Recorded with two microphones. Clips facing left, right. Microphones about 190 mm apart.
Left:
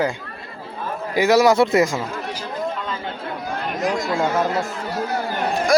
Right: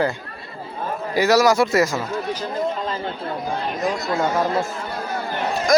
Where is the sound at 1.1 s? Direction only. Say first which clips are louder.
Left 1 dB; 15° left (ahead or behind).